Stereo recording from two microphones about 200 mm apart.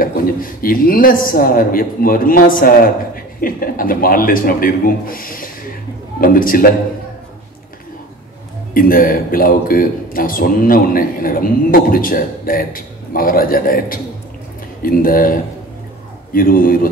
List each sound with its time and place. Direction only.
0.0 s a man's voice: 45° left (ahead or behind)
8.7 s a man's voice: 45° left (ahead or behind)